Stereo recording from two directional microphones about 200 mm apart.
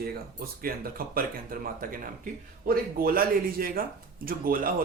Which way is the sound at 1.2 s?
45° right (ahead or behind).